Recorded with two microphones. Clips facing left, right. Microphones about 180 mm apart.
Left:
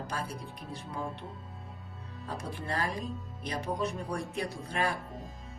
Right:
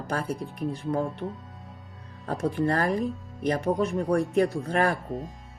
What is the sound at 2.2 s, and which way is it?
Speech, 55° right (ahead or behind).